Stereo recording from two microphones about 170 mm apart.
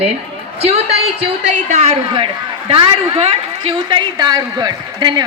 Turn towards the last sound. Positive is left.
turn(degrees=-25)  # may be behind; listen again after turning